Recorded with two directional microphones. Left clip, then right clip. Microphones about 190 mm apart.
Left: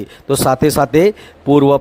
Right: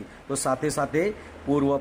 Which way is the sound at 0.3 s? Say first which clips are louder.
Left 13 dB; 40° left (ahead or behind).